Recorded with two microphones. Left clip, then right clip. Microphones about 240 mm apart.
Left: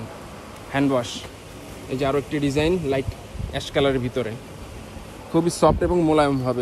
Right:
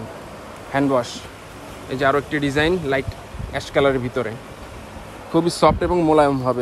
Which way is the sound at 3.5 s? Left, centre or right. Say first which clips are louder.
Right 3 dB; right.